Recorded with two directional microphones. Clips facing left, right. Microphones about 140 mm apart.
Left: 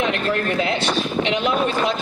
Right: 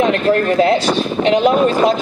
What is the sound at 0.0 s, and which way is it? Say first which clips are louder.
A woman's voice: right 8 dB; 40° right (ahead or behind).